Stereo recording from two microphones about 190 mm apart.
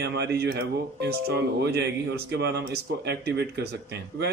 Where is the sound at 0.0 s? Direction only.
60° right (ahead or behind).